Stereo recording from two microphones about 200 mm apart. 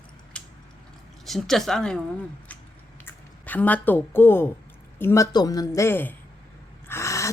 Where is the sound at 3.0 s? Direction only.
10° left (ahead or behind).